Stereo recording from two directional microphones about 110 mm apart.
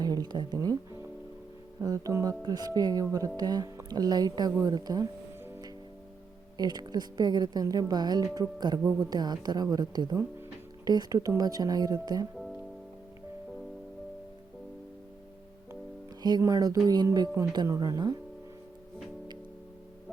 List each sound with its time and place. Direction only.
0.0 s speech: 40° right (ahead or behind)
6.6 s speech: 40° right (ahead or behind)
16.4 s speech: 35° right (ahead or behind)